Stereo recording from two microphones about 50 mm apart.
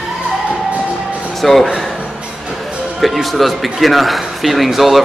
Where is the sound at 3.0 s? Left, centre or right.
Centre.